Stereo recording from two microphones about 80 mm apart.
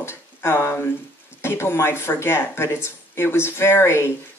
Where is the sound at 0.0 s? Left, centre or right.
Left.